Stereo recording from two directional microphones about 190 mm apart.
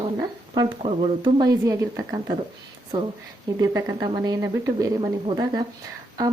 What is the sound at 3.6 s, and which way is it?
A woman's voice, 15° right (ahead or behind).